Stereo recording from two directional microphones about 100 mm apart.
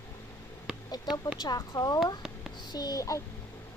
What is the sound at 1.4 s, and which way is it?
A child's voice, 40° left (ahead or behind).